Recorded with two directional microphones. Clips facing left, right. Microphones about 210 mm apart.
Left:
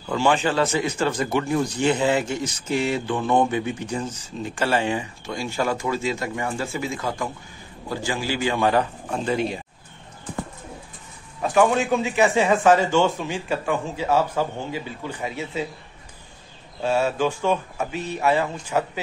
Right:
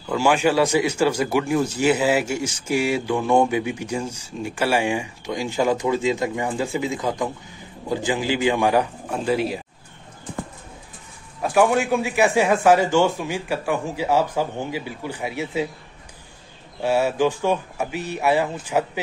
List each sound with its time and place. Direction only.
0.1 s speech: 10° right (ahead or behind)
11.4 s speech: 10° right (ahead or behind)
16.8 s speech: 15° right (ahead or behind)